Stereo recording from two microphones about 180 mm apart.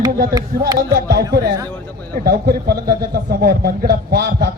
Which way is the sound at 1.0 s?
65° right (ahead or behind).